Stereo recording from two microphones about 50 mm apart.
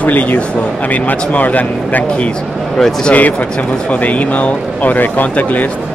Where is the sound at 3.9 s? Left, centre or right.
Left.